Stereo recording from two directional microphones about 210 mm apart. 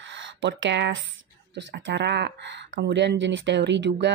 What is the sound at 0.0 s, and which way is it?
Speech, 60° right (ahead or behind).